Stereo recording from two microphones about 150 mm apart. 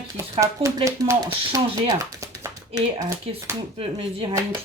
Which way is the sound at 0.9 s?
20° right (ahead or behind).